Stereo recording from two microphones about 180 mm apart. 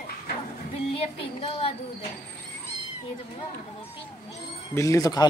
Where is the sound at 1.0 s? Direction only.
30° left (ahead or behind).